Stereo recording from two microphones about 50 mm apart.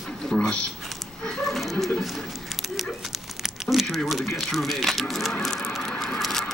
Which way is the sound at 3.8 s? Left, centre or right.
Centre.